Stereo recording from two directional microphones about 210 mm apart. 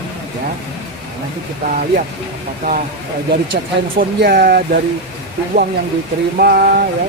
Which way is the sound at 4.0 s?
45° right (ahead or behind).